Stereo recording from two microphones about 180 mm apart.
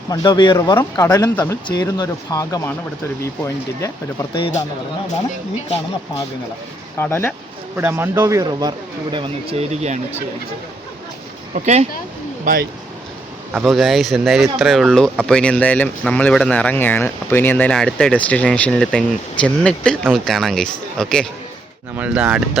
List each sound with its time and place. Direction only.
0.1 s speech: 25° left (ahead or behind)
7.0 s speech: 10° left (ahead or behind)
7.8 s speech: 10° right (ahead or behind)
9.1 s speech: 30° right (ahead or behind)
11.5 s speech: 40° right (ahead or behind)
13.5 s speech: centre (ahead or behind)
21.9 s speech: 5° right (ahead or behind)